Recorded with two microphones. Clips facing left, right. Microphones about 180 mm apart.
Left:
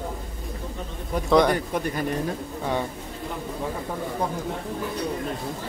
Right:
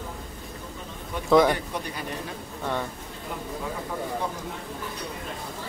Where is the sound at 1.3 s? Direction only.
Centre (ahead or behind).